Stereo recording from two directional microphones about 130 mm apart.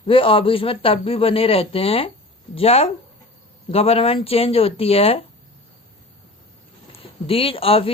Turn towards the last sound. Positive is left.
turn(degrees=45)  # may be behind; listen again after turning